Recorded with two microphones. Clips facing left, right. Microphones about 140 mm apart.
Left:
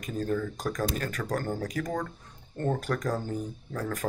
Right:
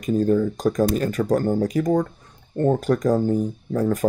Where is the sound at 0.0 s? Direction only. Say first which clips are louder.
Right 11 dB; 25° right (ahead or behind).